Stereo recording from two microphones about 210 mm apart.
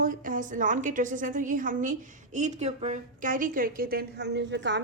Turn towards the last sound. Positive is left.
turn(degrees=-55)  # may be behind; listen again after turning